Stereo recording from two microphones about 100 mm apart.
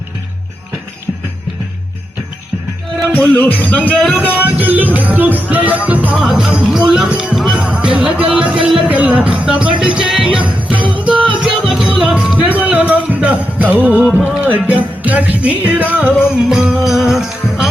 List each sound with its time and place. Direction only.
3.1 s music: 15° left (ahead or behind)
4.4 s music: 15° right (ahead or behind)
6.1 s music: 5° right (ahead or behind)
10.4 s jingle bell: 15° right (ahead or behind)
11.0 s music: 10° right (ahead or behind)